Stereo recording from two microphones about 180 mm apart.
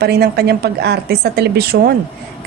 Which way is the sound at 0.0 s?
60° right (ahead or behind).